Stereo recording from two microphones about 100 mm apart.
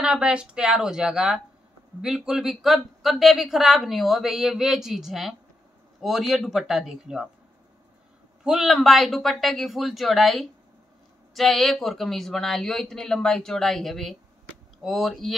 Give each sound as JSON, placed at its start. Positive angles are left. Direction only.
{"t": 0.0, "sound": "a woman's voice", "side_deg": -10}
{"t": 8.5, "sound": "a woman's voice", "side_deg": 0}